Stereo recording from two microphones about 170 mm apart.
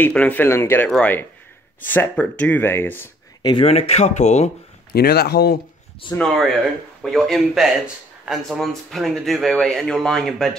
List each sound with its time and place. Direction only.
0.0 s speech: 10° left (ahead or behind)
3.4 s speech: 35° left (ahead or behind)
4.9 s speech: 70° left (ahead or behind)
6.1 s speech: centre (ahead or behind)